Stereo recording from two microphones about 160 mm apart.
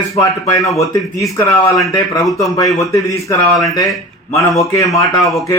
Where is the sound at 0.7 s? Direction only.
20° left (ahead or behind).